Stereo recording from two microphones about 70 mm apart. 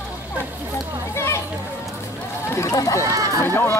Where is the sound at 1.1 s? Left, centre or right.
Left.